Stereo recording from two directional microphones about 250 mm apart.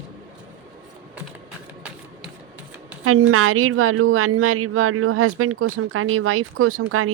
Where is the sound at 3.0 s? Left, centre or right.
Right.